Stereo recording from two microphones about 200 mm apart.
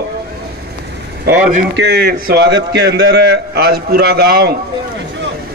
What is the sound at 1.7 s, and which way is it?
A man's voice, 55° right (ahead or behind).